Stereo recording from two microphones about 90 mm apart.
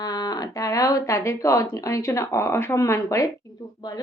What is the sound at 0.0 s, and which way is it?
Speech, 45° left (ahead or behind).